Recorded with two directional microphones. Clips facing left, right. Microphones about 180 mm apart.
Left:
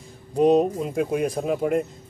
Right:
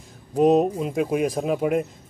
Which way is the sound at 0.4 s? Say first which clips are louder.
Even; 5° right (ahead or behind).